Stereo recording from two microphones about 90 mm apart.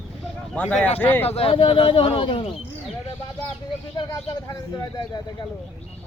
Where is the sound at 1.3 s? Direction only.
85° left.